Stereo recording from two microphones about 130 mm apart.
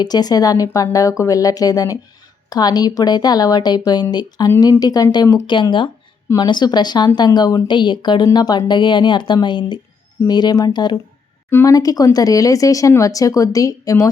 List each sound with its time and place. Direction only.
0.0 s speech: 30° left (ahead or behind)